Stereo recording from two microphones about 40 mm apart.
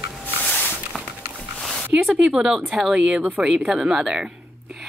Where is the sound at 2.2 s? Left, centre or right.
Centre.